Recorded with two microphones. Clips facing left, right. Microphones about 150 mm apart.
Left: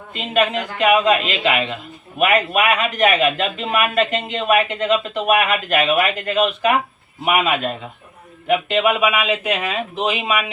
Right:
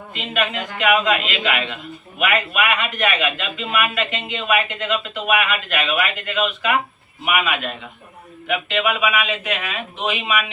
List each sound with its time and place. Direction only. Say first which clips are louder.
0.1 s a man's voice: left 5 dB; 35° left (ahead or behind)